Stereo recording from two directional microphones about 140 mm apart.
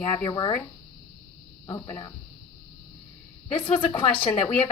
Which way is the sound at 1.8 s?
20° left (ahead or behind).